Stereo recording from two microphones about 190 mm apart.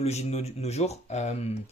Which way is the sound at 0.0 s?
35° left (ahead or behind).